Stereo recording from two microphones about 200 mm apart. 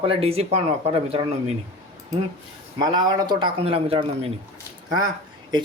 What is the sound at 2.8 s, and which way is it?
Speech, 20° right (ahead or behind).